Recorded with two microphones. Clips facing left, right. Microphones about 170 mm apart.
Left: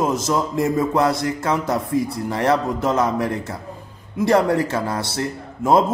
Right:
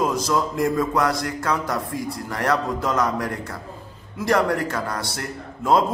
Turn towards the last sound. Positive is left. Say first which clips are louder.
# left 3 dB
turn(degrees=20)  # may be behind; listen again after turning